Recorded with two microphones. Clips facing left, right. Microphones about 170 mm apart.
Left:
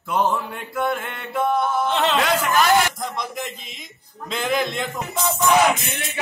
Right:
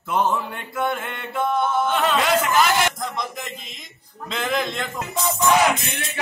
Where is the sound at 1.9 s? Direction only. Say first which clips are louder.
Even; 25° left (ahead or behind).